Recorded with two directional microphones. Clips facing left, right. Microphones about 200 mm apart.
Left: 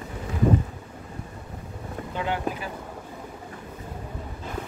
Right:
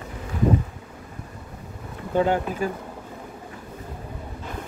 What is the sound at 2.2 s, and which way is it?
Speech, 45° right (ahead or behind).